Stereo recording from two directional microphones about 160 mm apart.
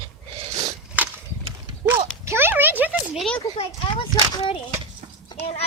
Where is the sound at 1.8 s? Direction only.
15° right (ahead or behind).